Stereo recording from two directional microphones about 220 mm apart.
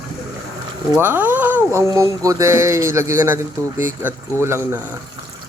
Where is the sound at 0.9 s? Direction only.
10° right (ahead or behind).